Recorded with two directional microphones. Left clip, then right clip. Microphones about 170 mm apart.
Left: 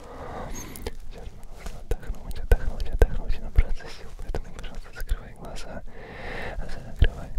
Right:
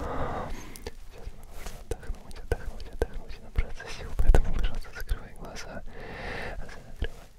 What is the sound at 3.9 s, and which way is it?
Whispering, 20° right (ahead or behind).